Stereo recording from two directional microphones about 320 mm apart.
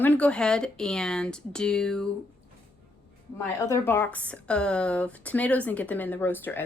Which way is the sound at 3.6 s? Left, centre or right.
Centre.